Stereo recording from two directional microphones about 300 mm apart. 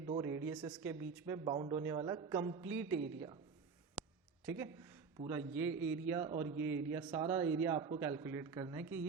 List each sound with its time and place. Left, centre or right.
0.0 s a man's voice: centre
4.4 s a man's voice: centre
5.7 s a man's voice: right
6.1 s a man's voice: centre